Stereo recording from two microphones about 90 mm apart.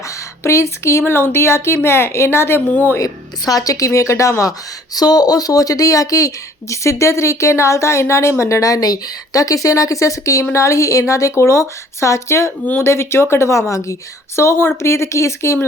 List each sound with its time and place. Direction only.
0.4 s a woman's voice: 30° left (ahead or behind)
3.0 s a woman's voice: 45° left (ahead or behind)